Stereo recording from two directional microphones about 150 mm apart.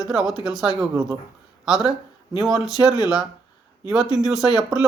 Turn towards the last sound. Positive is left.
turn(degrees=-5)  # may be behind; listen again after turning